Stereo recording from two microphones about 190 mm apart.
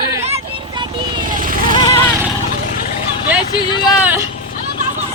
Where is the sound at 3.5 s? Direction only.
25° left (ahead or behind).